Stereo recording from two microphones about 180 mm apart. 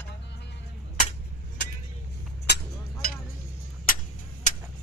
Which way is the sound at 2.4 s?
70° left (ahead or behind).